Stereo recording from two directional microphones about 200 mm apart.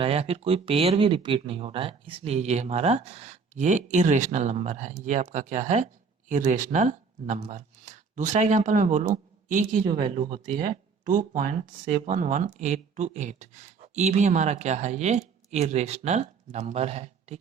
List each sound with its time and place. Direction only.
0.0 s speech: 30° right (ahead or behind)
9.9 s speech: 25° right (ahead or behind)
11.0 s speech: 40° right (ahead or behind)